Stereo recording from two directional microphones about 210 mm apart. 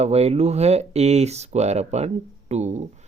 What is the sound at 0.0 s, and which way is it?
Speech, 30° right (ahead or behind).